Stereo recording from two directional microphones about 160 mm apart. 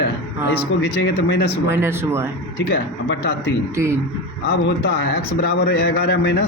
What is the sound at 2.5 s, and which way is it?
A man's voice, 85° left.